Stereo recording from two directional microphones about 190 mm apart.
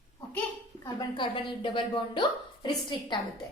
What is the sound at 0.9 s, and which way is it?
A woman's voice, 25° left (ahead or behind).